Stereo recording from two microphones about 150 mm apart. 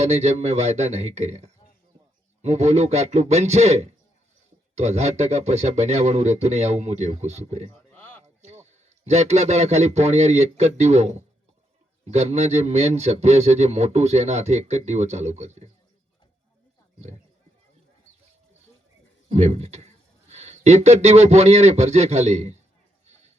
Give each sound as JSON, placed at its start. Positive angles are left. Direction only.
{"t": 0.0, "sound": "a man's voice", "side_deg": -45}
{"t": 8.2, "sound": "a sound", "side_deg": -45}
{"t": 9.0, "sound": "a man's voice", "side_deg": -45}
{"t": 19.3, "sound": "a man's voice", "side_deg": -45}